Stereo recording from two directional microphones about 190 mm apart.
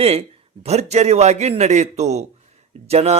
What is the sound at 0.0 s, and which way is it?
A man's voice, 30° right (ahead or behind).